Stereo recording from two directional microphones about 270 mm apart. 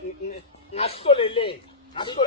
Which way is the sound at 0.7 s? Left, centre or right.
Left.